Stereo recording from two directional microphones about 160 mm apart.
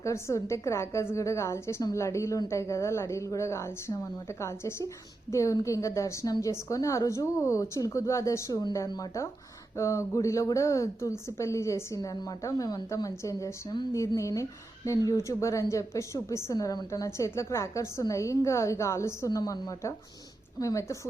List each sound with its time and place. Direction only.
0.0 s a woman's voice: 20° left (ahead or behind)